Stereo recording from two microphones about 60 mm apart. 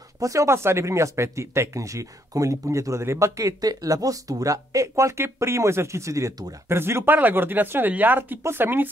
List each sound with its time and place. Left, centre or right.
0.2 s speech: right
0.5 s speech: right
6.7 s speech: right
7.1 s speech: right